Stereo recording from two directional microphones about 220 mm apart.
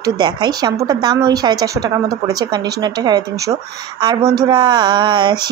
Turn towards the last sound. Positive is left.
turn(degrees=-20)  # may be behind; listen again after turning